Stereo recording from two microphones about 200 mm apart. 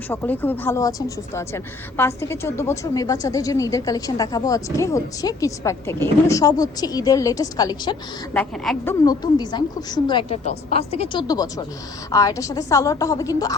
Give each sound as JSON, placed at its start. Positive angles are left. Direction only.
{"t": 0.1, "sound": "speech", "side_deg": 10}
{"t": 8.3, "sound": "a woman's voice", "side_deg": 5}